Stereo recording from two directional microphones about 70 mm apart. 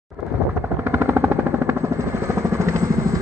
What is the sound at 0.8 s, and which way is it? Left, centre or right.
Vehicle, right.